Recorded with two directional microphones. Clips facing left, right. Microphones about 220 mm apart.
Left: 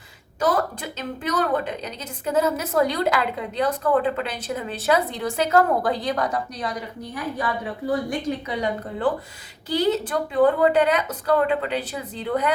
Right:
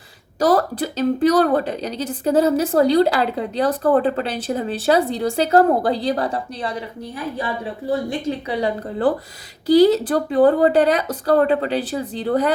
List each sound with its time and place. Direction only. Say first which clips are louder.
0.3 s a woman's voice: right 6 dB; 35° right (ahead or behind)